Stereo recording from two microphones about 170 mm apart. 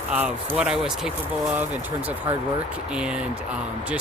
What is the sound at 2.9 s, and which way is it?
Speech, 5° right (ahead or behind).